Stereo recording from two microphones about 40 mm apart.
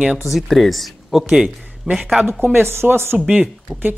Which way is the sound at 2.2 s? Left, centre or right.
Centre.